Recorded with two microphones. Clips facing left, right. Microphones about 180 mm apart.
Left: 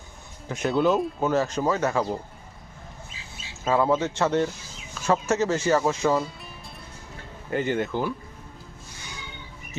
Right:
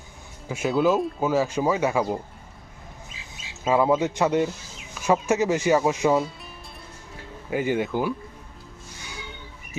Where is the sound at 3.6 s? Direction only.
10° right (ahead or behind).